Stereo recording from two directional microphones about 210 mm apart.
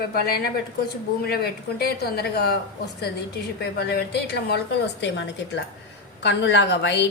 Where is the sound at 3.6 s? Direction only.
50° left (ahead or behind).